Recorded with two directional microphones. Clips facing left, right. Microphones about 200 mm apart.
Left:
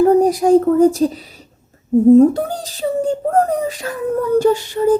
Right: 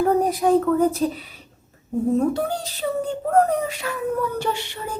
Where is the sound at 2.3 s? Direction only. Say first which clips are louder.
Left 3 dB; 40° left (ahead or behind).